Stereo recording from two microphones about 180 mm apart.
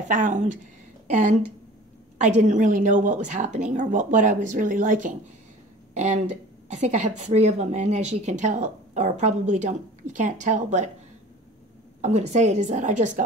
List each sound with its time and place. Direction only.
0.1 s a woman's voice: 45° right (ahead or behind)
2.1 s a woman's voice: 40° right (ahead or behind)
12.0 s speech: 40° right (ahead or behind)